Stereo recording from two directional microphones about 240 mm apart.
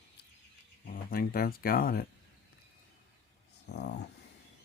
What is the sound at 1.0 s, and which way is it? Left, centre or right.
Speech, left.